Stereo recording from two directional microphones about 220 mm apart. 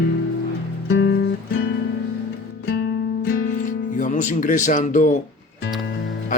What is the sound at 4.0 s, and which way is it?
Speech, 35° left (ahead or behind).